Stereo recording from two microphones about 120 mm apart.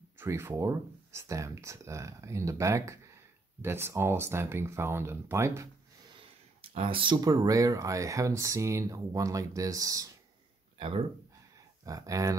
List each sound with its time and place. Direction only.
0.2 s speech: 20° right (ahead or behind)
6.6 s speech: 50° right (ahead or behind)
7.2 s speech: 30° right (ahead or behind)
10.8 s speech: 45° right (ahead or behind)
11.8 s speech: 30° right (ahead or behind)